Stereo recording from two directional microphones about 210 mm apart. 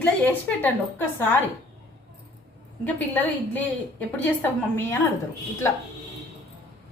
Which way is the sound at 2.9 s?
10° left (ahead or behind).